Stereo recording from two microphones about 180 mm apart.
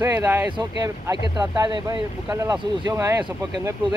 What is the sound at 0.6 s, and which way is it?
Speech, 20° right (ahead or behind).